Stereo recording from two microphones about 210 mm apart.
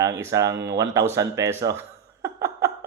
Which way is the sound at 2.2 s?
15° right (ahead or behind).